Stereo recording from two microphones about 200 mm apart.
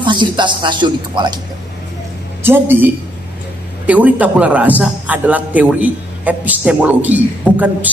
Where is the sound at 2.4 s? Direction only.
10° right (ahead or behind).